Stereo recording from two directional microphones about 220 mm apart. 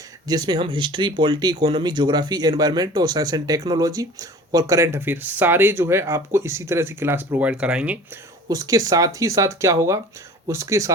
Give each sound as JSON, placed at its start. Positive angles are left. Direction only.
{"t": 0.3, "sound": "speech", "side_deg": -20}
{"t": 8.4, "sound": "speech", "side_deg": -15}